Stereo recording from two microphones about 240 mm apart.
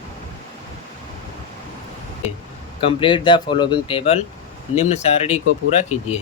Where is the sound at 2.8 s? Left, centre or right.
Centre.